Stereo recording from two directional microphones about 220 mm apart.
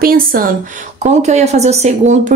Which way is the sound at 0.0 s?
40° right (ahead or behind).